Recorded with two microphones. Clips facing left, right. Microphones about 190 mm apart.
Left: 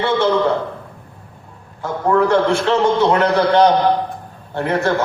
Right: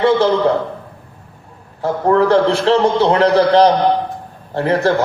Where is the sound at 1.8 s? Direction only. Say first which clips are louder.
Right 3 dB; 35° right (ahead or behind).